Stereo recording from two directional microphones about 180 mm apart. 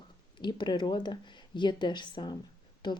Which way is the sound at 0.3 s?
25° left (ahead or behind).